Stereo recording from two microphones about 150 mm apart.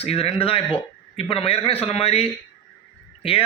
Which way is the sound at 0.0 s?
40° left (ahead or behind).